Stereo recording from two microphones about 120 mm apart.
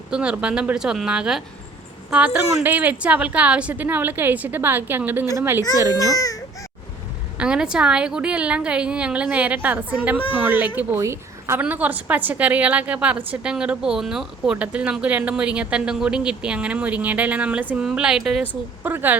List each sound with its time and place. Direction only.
0.1 s a woman's voice: 10° right (ahead or behind)
5.9 s a child's voice: 30° left (ahead or behind)
7.3 s a woman's voice: 5° right (ahead or behind)
18.8 s a woman's voice: 15° right (ahead or behind)